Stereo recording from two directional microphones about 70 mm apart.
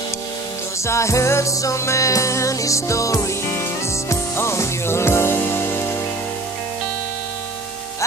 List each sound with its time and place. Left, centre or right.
0.8 s music: left